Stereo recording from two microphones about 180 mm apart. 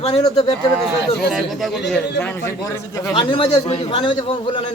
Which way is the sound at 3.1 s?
25° left (ahead or behind).